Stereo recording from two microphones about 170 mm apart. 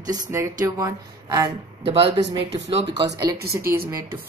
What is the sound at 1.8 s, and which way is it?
A woman's voice, 35° right (ahead or behind).